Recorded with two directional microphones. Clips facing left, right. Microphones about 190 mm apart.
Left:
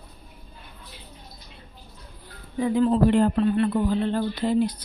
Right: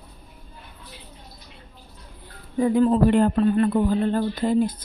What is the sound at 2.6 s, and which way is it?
Speech, 50° right (ahead or behind).